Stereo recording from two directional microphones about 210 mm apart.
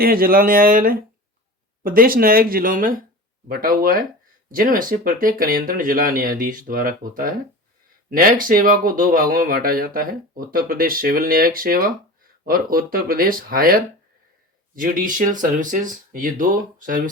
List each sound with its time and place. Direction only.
0.0 s speech: 45° right (ahead or behind)
14.8 s speech: 40° right (ahead or behind)